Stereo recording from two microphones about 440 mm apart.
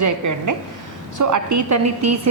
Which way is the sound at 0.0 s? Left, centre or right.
Right.